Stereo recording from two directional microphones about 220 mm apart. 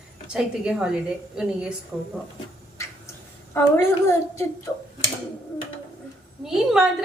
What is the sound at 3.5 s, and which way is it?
Speech, 15° left (ahead or behind).